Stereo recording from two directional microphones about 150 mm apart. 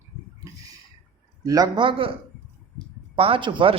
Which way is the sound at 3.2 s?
35° right (ahead or behind).